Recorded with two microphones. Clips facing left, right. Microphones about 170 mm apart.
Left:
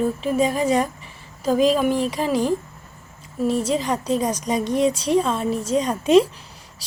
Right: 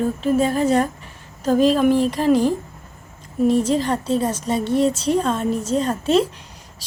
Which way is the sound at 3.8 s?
10° left (ahead or behind).